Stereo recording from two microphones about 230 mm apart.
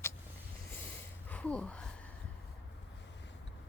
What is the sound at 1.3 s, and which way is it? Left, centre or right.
Speech, centre.